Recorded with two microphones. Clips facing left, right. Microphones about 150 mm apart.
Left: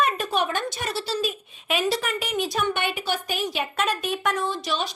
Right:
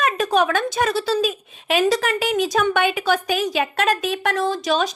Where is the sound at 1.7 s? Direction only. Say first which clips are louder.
Right 6 dB; 90° right.